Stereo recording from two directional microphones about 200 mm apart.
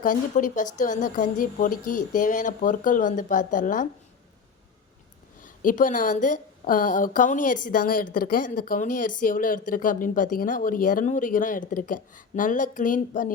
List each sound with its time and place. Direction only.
0.0 s a woman's voice: 40° left (ahead or behind)
5.4 s a woman's voice: 40° left (ahead or behind)